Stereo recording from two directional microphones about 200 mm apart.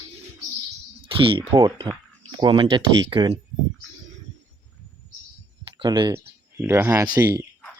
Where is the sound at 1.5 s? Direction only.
20° right (ahead or behind).